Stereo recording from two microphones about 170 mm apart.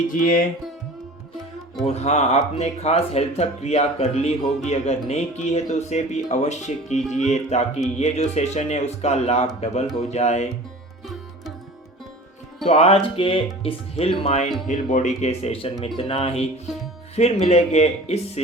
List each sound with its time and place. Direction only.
0.1 s music: 55° left (ahead or behind)
1.9 s speech: 40° left (ahead or behind)
12.6 s speech: 40° left (ahead or behind)